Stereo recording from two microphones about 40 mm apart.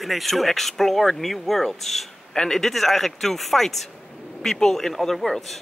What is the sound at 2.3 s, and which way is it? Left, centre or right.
Speech, centre.